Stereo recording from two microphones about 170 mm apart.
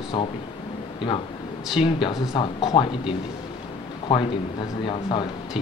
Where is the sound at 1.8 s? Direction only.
25° left (ahead or behind).